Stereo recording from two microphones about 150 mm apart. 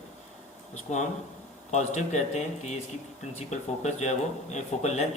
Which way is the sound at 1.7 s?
50° left (ahead or behind).